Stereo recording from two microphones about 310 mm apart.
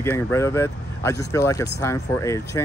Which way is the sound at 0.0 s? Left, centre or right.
Centre.